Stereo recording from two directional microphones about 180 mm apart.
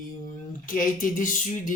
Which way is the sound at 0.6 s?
50° left (ahead or behind).